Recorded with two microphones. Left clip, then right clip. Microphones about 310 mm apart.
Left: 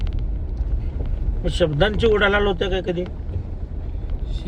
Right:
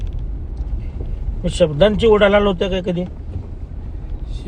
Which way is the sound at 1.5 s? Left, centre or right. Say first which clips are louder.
Right 6 dB; centre.